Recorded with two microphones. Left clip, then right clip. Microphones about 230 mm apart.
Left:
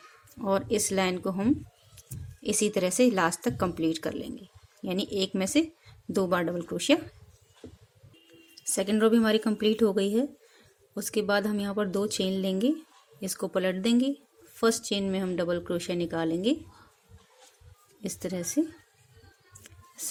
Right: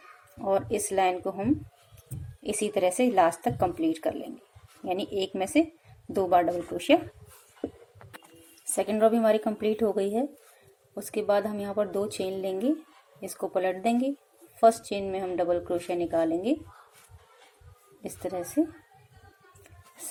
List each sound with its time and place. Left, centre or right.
0.4 s a woman's voice: left
8.7 s a woman's voice: left
18.0 s a woman's voice: left